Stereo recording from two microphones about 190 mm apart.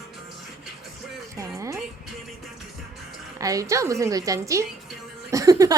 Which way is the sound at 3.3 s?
15° right (ahead or behind).